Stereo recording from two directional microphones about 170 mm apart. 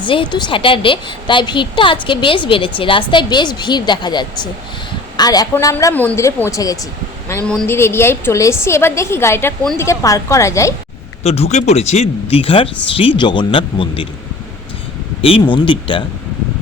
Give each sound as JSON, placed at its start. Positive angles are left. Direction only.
{"t": 0.0, "sound": "a woman's voice", "side_deg": 30}
{"t": 5.7, "sound": "a woman's voice", "side_deg": 10}
{"t": 7.4, "sound": "a woman's voice", "side_deg": 10}
{"t": 11.2, "sound": "speech", "side_deg": 40}
{"t": 15.2, "sound": "a woman's voice", "side_deg": 30}